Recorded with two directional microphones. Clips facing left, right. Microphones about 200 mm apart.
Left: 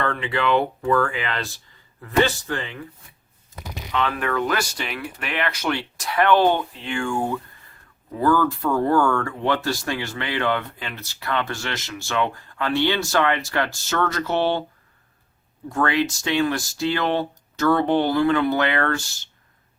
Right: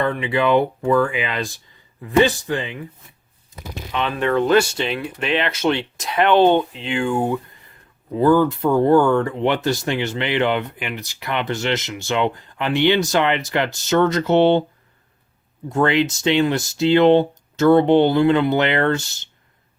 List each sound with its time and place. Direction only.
0.0 s speech: 15° right (ahead or behind)
3.9 s speech: 20° right (ahead or behind)
15.7 s speech: 25° right (ahead or behind)